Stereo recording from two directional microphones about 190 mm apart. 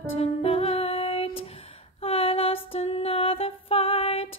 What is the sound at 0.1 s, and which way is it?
Music, 35° left (ahead or behind).